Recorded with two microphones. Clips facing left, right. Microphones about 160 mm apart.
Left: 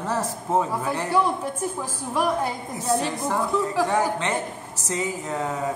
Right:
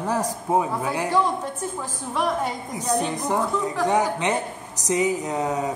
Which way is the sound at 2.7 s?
15° right (ahead or behind).